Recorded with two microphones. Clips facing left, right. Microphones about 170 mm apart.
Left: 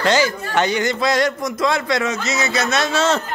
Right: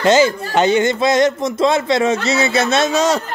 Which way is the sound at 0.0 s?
25° right (ahead or behind).